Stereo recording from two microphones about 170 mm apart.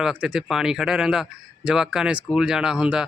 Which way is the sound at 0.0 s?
5° right (ahead or behind).